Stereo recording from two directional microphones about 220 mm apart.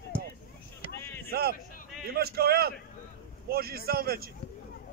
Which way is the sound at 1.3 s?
45° right (ahead or behind).